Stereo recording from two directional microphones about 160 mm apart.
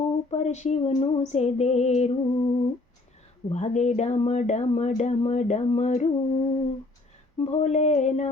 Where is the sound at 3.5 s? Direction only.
45° left (ahead or behind).